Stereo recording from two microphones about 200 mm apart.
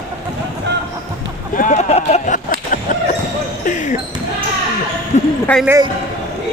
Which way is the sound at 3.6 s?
40° left (ahead or behind).